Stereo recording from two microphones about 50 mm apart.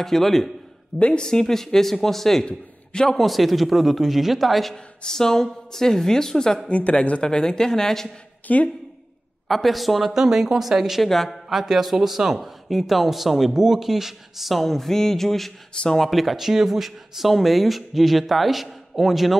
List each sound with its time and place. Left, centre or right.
0.0 s speech: centre
0.9 s speech: left
1.2 s a woman's voice: centre
2.4 s a man's voice: centre
3.1 s a woman's voice: centre
6.7 s a woman's voice: left; by 8.1 s centre
8.5 s speech: left
9.5 s speech: centre
11.1 s speech: centre
11.4 s speech: centre